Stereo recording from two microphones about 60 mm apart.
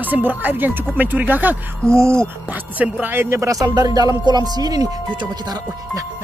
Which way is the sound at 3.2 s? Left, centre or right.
Right.